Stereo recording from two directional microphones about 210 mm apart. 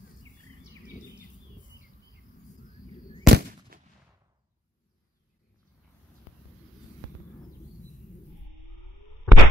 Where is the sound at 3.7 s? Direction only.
45° right (ahead or behind).